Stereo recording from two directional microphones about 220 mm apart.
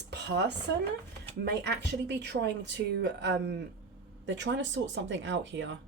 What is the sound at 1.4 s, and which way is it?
Speech, 50° right (ahead or behind).